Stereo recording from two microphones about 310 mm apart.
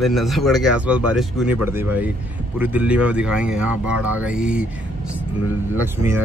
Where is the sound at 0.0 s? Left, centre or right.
Centre.